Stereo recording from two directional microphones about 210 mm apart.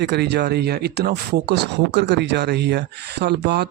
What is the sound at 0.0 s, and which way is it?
Speech, 55° right (ahead or behind).